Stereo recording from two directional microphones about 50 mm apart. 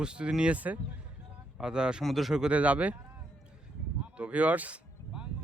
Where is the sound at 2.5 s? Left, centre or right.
Right.